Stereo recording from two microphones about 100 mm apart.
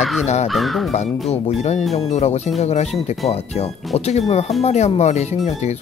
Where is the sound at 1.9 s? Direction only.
90° left.